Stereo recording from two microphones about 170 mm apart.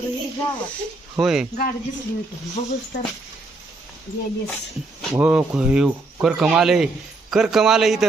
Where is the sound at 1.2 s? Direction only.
5° right (ahead or behind).